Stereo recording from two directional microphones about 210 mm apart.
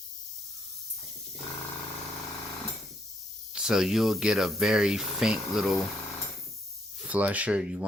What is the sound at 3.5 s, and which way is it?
Speech, centre (ahead or behind).